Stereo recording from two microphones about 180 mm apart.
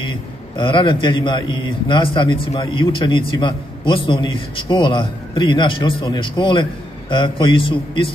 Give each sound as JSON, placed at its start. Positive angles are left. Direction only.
{"t": 0.0, "sound": "a man's voice", "side_deg": 25}